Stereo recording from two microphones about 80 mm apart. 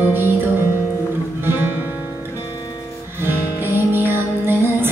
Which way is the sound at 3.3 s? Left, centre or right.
Right.